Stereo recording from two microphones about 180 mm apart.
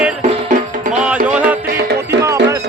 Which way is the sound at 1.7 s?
60° right (ahead or behind).